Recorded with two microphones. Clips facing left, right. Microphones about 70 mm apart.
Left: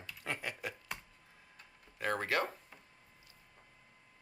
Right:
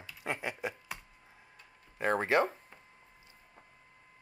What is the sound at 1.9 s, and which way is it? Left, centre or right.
Speech, right.